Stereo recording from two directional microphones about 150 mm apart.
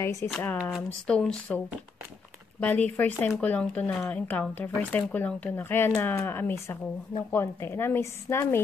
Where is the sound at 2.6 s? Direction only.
10° left (ahead or behind).